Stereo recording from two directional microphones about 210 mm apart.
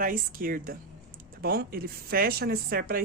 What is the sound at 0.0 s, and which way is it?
Speech, 40° right (ahead or behind).